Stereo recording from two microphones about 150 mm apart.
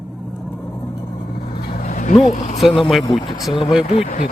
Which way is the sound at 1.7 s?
60° left (ahead or behind).